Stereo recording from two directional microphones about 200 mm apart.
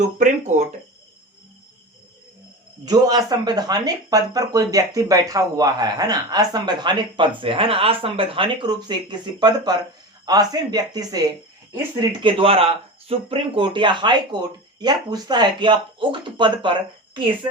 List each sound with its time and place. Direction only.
0.2 s speech: 40° right (ahead or behind)
2.8 s speech: 20° right (ahead or behind)